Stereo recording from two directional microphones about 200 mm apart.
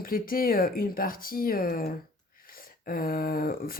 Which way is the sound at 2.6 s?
45° left (ahead or behind).